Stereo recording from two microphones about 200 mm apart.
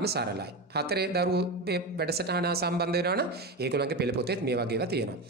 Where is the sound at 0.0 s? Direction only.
55° right (ahead or behind).